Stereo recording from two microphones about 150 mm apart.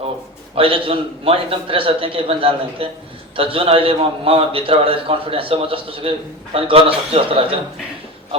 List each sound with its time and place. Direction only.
0.5 s a man's voice: 40° right (ahead or behind)